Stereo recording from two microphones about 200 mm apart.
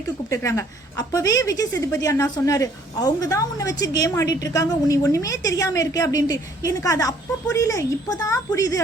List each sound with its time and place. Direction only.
0.3 s a woman's voice: 15° left (ahead or behind)